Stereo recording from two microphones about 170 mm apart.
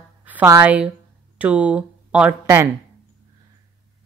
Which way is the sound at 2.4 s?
20° right (ahead or behind).